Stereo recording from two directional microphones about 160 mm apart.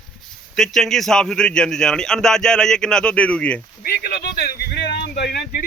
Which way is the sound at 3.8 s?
75° left (ahead or behind).